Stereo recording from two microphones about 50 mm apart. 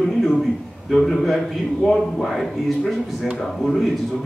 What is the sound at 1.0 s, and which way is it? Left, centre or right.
Speech, centre.